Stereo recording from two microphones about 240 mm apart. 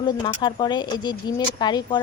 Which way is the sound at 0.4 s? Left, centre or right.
Centre.